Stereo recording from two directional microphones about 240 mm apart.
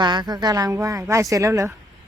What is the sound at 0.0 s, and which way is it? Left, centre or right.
Speech, centre.